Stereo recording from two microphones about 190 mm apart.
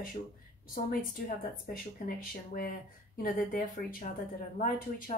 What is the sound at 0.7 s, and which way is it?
A woman's voice, 50° left (ahead or behind).